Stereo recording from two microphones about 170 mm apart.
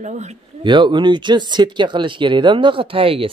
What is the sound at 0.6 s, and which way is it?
Speech, 25° right (ahead or behind).